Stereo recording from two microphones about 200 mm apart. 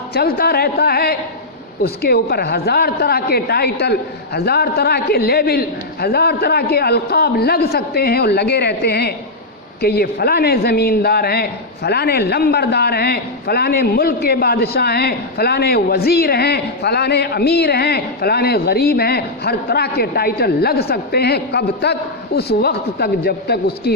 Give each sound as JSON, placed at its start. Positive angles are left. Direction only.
{"t": 0.1, "sound": "a man's voice", "side_deg": 50}